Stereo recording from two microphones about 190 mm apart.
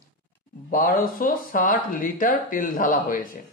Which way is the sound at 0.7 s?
50° left (ahead or behind).